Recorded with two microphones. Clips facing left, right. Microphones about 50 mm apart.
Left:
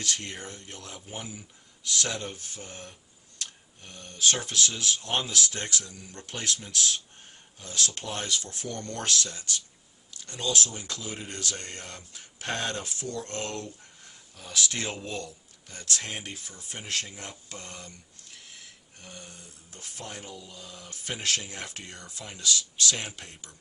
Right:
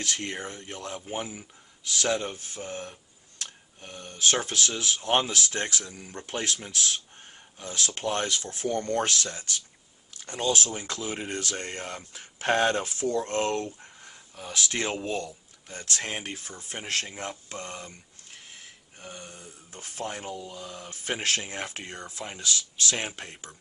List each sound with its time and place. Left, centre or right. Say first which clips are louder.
0.0 s speech: right 2 dB; right
0.9 s speech: right 5 dB; right; by 6.6 s centre
7.6 s speech: right 3 dB; right
16.0 s speech: right 3 dB; right
17.6 s speech: right 5 dB; centre; by 20.5 s right
20.5 s speech: right 5 dB; centre